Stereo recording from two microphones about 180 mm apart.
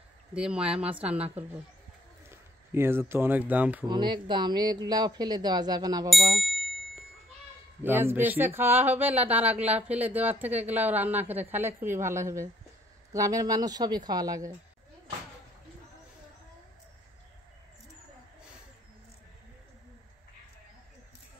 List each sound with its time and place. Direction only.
0.3 s speech: 5° right (ahead or behind)
3.9 s speech: 25° right (ahead or behind)
6.0 s ding: centre (ahead or behind)
7.8 s speech: 10° right (ahead or behind)